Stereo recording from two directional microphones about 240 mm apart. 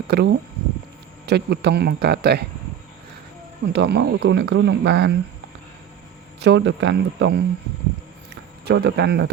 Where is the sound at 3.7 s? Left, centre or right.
Right.